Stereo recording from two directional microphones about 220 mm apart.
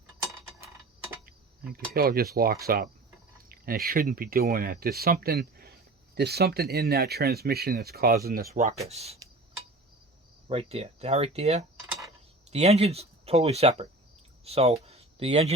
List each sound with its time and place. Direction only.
1.7 s speech: 45° right (ahead or behind)
8.5 s speech: 30° right (ahead or behind)
10.5 s speech: 25° right (ahead or behind)
14.8 s a sound: 30° right (ahead or behind)